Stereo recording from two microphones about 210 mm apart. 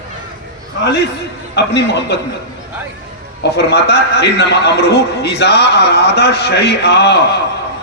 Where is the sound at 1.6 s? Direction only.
55° left (ahead or behind).